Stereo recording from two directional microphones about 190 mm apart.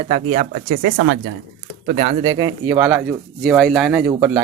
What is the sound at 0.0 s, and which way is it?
Speech, 35° right (ahead or behind).